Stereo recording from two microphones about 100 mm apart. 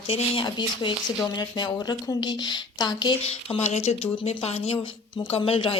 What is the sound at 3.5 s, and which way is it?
Speech, 90° left.